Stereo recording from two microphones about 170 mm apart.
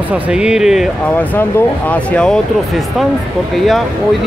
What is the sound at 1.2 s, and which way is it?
Speech, 10° left (ahead or behind).